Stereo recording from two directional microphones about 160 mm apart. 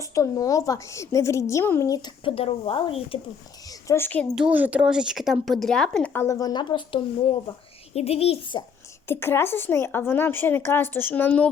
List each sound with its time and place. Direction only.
0.0 s a woman's voice: 20° left (ahead or behind)
3.7 s speech: 15° left (ahead or behind)
4.4 s speech: 10° right (ahead or behind)
6.2 s a woman's voice: 20° left (ahead or behind)
9.0 s a woman's voice: 15° left (ahead or behind)